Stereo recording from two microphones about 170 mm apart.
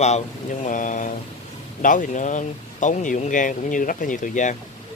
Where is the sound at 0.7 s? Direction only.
50° left (ahead or behind).